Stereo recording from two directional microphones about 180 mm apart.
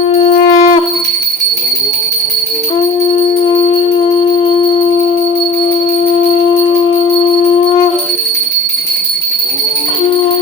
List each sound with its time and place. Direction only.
0.1 s music: 35° left (ahead or behind)
3.1 s music: 30° left (ahead or behind)
6.5 s music: 30° left (ahead or behind)